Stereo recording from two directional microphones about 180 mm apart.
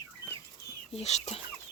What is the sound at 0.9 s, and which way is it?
Speech, 40° left (ahead or behind).